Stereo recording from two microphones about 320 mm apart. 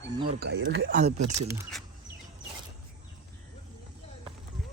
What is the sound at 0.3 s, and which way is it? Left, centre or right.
Speech, right.